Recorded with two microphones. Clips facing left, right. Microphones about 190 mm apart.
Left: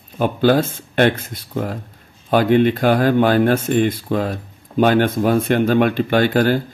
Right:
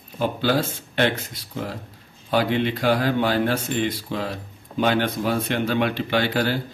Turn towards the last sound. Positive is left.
turn(degrees=50)  # may be behind; listen again after turning